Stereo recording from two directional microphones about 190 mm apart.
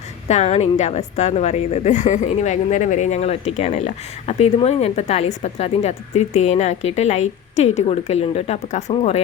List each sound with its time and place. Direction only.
0.3 s a woman's voice: 35° left (ahead or behind)